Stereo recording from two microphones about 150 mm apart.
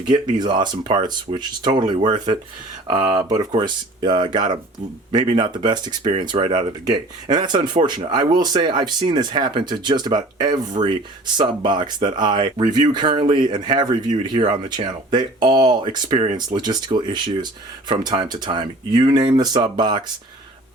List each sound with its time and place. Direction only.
0.1 s speech: 30° right (ahead or behind)